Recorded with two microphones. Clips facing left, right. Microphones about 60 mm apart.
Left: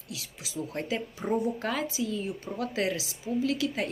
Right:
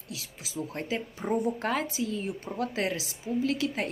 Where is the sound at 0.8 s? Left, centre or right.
Centre.